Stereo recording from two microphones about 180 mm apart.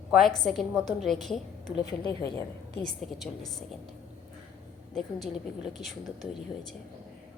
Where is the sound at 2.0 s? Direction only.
20° left (ahead or behind).